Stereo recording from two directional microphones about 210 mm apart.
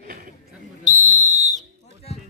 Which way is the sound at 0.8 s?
35° right (ahead or behind).